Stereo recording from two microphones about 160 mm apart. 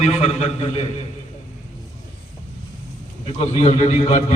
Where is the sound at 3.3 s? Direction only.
40° left (ahead or behind).